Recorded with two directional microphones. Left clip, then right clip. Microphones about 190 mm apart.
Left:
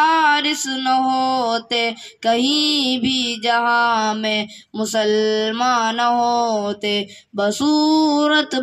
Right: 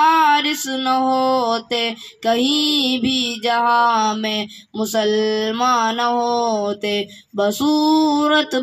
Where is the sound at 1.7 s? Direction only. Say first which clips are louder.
Left 1 dB; 20° left (ahead or behind).